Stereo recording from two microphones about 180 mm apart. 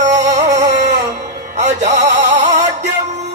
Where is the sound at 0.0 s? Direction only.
40° right (ahead or behind).